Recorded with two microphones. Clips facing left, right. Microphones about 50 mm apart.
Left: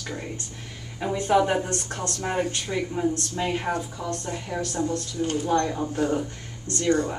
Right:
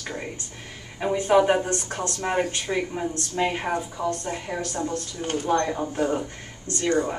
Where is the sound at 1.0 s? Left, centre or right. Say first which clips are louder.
Right 2 dB; centre.